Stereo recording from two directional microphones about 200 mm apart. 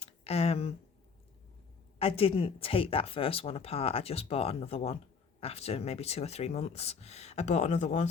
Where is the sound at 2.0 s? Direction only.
30° left (ahead or behind).